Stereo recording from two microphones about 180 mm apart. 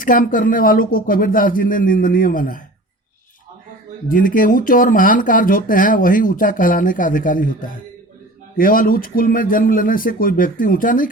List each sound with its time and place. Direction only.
0.0 s speech: 50° left (ahead or behind)
4.1 s speech: 50° left (ahead or behind)